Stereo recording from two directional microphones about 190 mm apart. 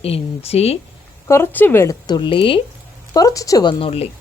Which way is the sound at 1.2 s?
15° left (ahead or behind).